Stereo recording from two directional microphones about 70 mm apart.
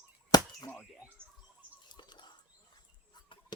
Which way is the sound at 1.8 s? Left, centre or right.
Left.